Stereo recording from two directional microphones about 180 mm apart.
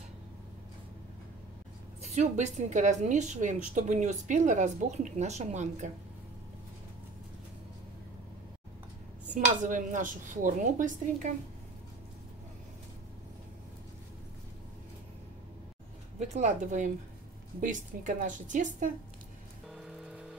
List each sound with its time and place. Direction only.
2.0 s speech: 40° right (ahead or behind)
9.3 s speech: 45° right (ahead or behind)
16.2 s speech: 40° right (ahead or behind)
19.7 s rain on surface: 5° right (ahead or behind)